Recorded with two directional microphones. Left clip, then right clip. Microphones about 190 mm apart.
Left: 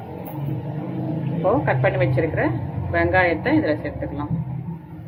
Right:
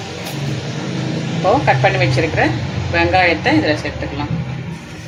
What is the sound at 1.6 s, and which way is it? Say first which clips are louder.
Speech: right 6 dB; 20° right (ahead or behind).